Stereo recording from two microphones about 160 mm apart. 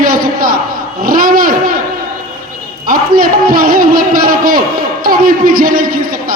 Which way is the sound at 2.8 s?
60° right (ahead or behind).